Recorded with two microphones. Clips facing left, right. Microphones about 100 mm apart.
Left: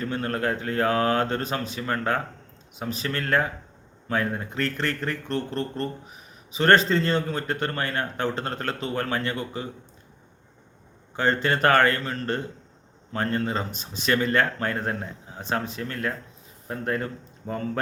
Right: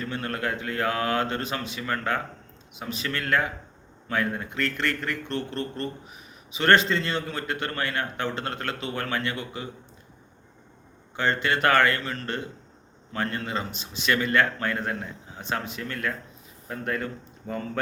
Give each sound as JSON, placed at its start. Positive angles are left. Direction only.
{"t": 0.0, "sound": "a man's voice", "side_deg": 35}
{"t": 11.2, "sound": "a man's voice", "side_deg": 40}